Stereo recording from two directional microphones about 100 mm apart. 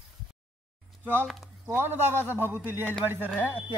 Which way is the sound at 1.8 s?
25° right (ahead or behind).